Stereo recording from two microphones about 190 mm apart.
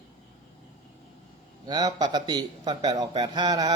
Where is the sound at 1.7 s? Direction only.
20° right (ahead or behind).